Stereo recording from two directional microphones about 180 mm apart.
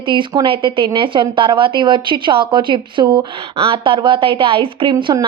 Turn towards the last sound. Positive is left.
turn(degrees=-25)  # may be behind; listen again after turning